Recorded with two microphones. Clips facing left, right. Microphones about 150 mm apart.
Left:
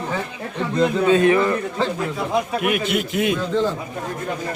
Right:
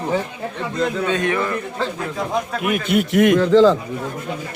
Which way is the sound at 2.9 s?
65° right (ahead or behind).